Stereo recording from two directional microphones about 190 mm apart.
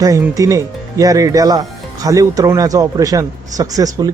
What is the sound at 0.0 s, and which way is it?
Speech, 20° right (ahead or behind).